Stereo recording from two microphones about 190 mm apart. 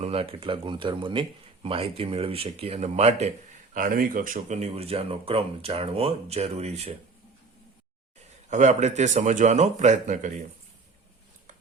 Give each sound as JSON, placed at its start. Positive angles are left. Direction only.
{"t": 0.0, "sound": "speech", "side_deg": -30}
{"t": 3.8, "sound": "speech", "side_deg": -45}
{"t": 4.4, "sound": "speech", "side_deg": -35}
{"t": 8.4, "sound": "speech", "side_deg": -40}